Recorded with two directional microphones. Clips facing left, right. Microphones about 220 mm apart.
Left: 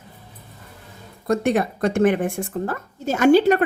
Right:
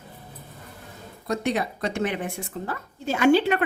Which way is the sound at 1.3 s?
50° left (ahead or behind).